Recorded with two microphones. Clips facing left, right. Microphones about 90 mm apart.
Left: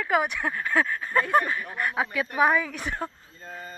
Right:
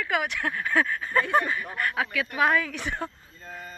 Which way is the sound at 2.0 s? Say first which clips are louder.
Left 1 dB; 30° left (ahead or behind).